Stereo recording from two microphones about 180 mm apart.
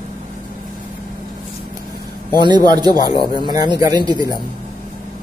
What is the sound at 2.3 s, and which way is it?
Speech, 25° right (ahead or behind).